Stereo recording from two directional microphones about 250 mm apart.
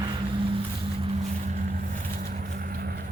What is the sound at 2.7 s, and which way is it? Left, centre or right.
Vehicle, right.